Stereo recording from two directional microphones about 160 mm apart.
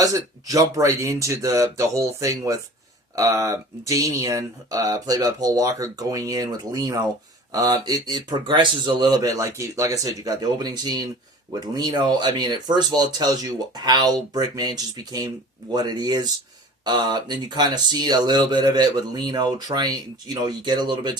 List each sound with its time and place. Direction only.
0.0 s speech: 20° right (ahead or behind)